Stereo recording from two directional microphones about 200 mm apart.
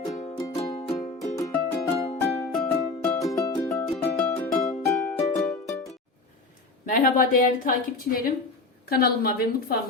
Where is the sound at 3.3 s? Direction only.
15° left (ahead or behind).